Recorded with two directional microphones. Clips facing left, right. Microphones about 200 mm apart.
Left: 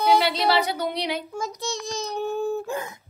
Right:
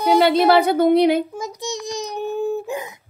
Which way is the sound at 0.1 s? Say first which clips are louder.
Right 9 dB; 50° right (ahead or behind).